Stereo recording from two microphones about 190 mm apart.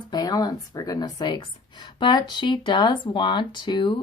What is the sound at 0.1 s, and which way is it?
Speech, 20° left (ahead or behind).